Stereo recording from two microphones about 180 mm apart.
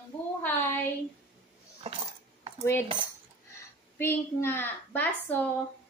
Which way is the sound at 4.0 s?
10° left (ahead or behind).